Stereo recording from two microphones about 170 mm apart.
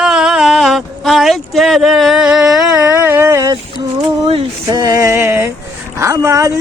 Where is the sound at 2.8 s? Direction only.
15° right (ahead or behind).